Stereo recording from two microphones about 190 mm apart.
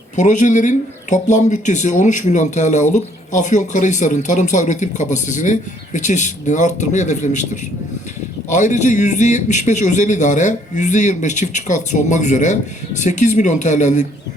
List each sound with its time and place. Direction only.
0.2 s speech: 40° left (ahead or behind)